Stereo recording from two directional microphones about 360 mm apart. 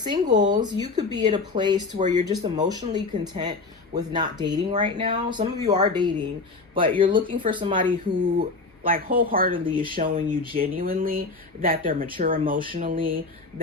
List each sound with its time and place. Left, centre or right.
0.0 s speech: centre